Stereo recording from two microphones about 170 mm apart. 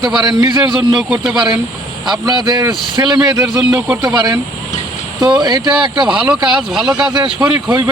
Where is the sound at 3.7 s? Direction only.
5° right (ahead or behind).